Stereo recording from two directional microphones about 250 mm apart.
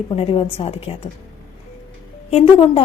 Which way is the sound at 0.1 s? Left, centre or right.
Left.